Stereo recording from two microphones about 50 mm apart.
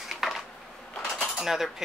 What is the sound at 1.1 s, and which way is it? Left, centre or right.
Cutlery, centre.